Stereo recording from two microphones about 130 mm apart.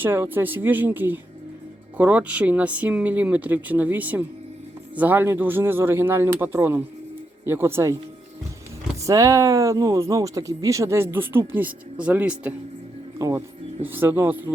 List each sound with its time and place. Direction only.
0.0 s speech: 15° right (ahead or behind)
9.0 s speech: 25° right (ahead or behind); by 12.5 s 10° right (ahead or behind)
13.1 s a man's voice: 25° right (ahead or behind)